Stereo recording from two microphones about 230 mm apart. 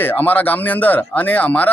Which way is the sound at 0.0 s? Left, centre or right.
Centre.